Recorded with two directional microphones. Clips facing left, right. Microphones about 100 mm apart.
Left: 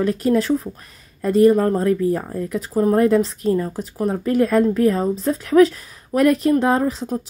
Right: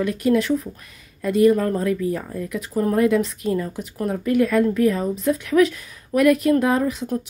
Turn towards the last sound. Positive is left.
turn(degrees=30)  # may be behind; listen again after turning